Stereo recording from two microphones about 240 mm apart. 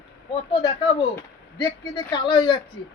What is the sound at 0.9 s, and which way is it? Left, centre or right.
Speech, centre.